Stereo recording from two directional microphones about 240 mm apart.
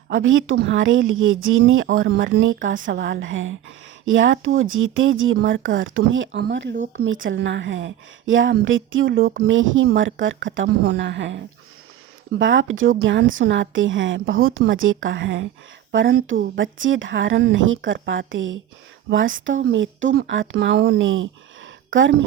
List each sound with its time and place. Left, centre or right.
0.1 s speech: right
1.9 s speech: right
9.2 s speech: right
9.5 s speech: right